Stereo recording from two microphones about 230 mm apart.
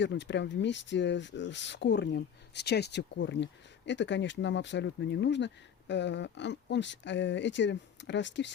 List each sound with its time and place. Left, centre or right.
0.0 s speech: left